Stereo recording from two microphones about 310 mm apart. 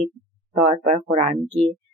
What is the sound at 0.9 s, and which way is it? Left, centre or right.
Speech, centre.